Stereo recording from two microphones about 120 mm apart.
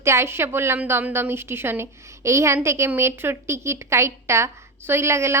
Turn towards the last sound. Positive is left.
turn(degrees=-20)  # may be behind; listen again after turning